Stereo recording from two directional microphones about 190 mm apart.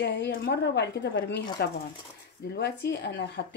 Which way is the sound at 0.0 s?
65° left (ahead or behind).